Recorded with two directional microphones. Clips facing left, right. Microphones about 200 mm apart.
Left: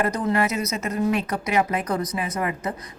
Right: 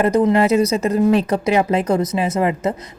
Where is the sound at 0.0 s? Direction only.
25° right (ahead or behind).